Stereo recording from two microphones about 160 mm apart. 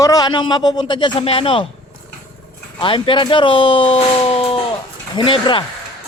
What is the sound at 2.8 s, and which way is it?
Speech, 30° left (ahead or behind).